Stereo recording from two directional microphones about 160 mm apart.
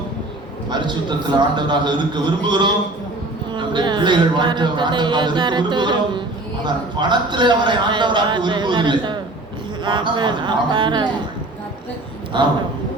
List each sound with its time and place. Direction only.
0.7 s a man's voice: 30° right (ahead or behind)
12.3 s a man's voice: 30° right (ahead or behind)